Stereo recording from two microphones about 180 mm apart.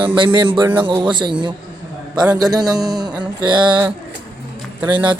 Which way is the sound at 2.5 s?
20° right (ahead or behind).